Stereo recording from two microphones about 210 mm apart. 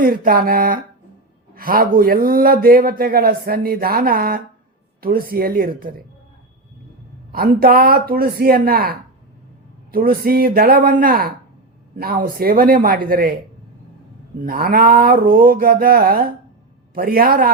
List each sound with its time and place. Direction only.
0.0 s a man's voice: 45° right (ahead or behind)
7.3 s a man's voice: 45° right (ahead or behind)
14.3 s a man's voice: 45° right (ahead or behind)